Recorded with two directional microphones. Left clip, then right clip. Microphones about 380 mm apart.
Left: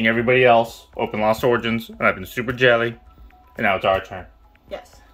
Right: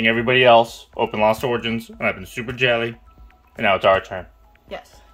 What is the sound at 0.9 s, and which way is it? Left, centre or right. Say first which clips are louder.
Speech: right 4 dB; right.